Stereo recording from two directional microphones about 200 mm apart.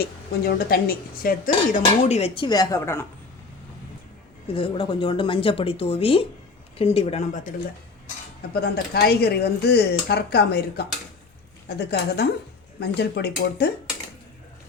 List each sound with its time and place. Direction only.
0.0 s speech: 50° left (ahead or behind)
1.8 s speech: 30° left (ahead or behind); by 3.1 s 10° left (ahead or behind)
4.5 s speech: 25° left (ahead or behind)
8.4 s speech: 50° left (ahead or behind)